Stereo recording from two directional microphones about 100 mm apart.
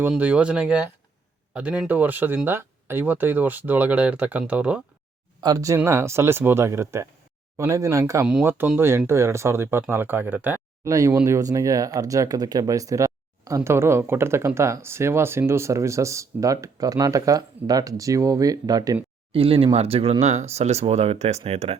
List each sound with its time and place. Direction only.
0.2 s speech: 10° right (ahead or behind)
5.4 s speech: 40° right (ahead or behind)
5.7 s speech: 25° right (ahead or behind)
8.4 s speech: 15° right (ahead or behind)
10.8 s speech: 30° right (ahead or behind)
19.3 s speech: 65° right (ahead or behind); by 21.8 s 90° right